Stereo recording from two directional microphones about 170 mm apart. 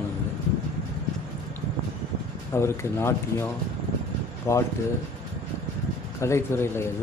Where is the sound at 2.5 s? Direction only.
15° left (ahead or behind).